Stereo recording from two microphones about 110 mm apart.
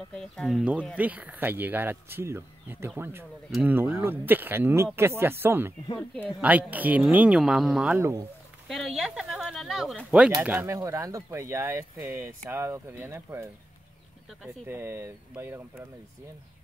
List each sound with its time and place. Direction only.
0.1 s speech: 5° left (ahead or behind)
0.9 s speech: 15° right (ahead or behind)
7.9 s speech: 25° right (ahead or behind)
8.6 s speech: centre (ahead or behind)
10.4 s speech: 15° right (ahead or behind)
10.7 s speech: 30° right (ahead or behind)
14.7 s speech: 25° right (ahead or behind)